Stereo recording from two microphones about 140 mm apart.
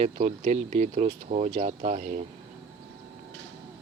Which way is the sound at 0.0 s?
55° right (ahead or behind).